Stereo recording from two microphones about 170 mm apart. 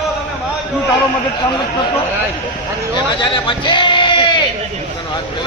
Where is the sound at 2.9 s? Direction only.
25° left (ahead or behind).